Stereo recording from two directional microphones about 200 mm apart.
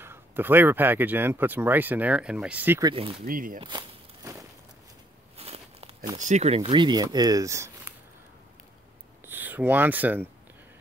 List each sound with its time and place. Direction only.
0.0 s speech: 10° right (ahead or behind)
2.9 s speech: 25° right (ahead or behind)
3.3 s speech: 45° right (ahead or behind)
3.5 s walk: 25° right (ahead or behind)
5.4 s a sound: 30° right (ahead or behind)
6.1 s speech: 35° right (ahead or behind); by 7.9 s 15° right (ahead or behind)
9.2 s speech: 10° right (ahead or behind)